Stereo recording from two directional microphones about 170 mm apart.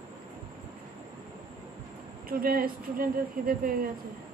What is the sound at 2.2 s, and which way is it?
A woman's voice, 60° right (ahead or behind).